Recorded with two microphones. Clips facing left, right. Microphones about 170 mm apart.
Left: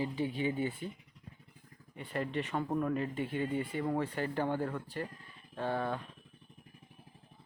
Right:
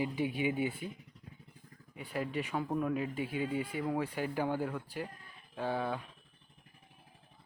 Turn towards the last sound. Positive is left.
turn(degrees=-5)  # may be behind; listen again after turning